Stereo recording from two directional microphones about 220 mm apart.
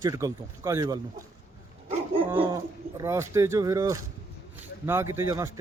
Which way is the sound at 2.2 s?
10° right (ahead or behind).